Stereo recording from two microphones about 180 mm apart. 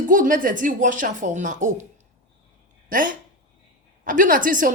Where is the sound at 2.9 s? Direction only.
50° right (ahead or behind).